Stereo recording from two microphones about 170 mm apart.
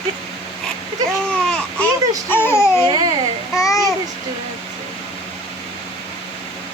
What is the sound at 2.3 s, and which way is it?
A child's voice, 15° left (ahead or behind).